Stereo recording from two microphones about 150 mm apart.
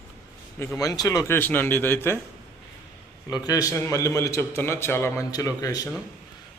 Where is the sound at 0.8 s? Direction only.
25° left (ahead or behind).